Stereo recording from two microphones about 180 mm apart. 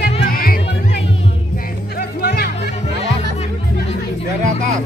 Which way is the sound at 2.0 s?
60° left (ahead or behind).